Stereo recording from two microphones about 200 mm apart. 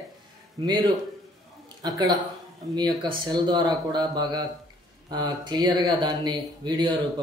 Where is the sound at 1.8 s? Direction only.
20° right (ahead or behind).